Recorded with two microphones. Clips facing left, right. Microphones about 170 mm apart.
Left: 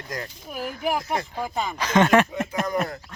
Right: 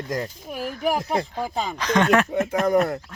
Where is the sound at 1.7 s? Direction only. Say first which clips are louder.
Left 1 dB; 5° left (ahead or behind).